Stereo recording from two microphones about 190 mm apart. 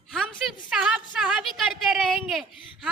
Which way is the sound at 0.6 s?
5° right (ahead or behind).